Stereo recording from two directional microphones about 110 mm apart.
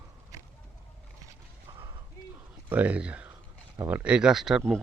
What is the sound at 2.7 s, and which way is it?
Speech, 10° right (ahead or behind).